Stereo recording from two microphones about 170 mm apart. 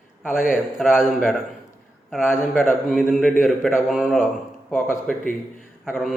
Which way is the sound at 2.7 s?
5° left (ahead or behind).